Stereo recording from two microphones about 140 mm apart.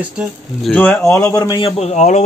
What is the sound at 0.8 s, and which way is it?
Speech, 15° left (ahead or behind).